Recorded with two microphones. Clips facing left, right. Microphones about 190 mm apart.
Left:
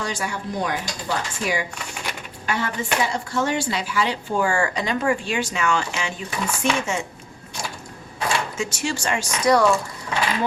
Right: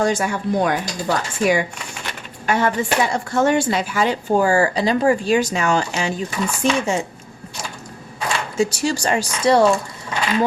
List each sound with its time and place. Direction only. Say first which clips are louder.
0.0 s speech: right 8 dB; 45° right (ahead or behind)
8.5 s speech: right 7 dB; 35° right (ahead or behind)